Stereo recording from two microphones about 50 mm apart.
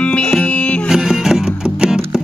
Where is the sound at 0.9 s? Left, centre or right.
Centre.